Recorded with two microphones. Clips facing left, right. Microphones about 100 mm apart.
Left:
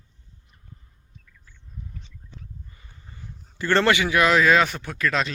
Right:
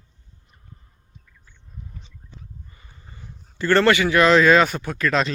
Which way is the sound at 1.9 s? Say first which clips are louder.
Even; 15° right (ahead or behind).